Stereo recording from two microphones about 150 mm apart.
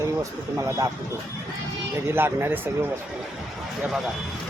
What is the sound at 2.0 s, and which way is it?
Speech, 15° right (ahead or behind).